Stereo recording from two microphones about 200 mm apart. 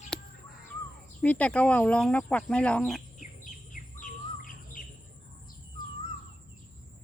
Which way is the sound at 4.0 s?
40° left (ahead or behind).